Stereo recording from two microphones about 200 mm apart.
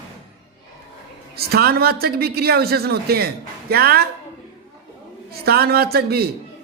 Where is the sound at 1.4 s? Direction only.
50° right (ahead or behind).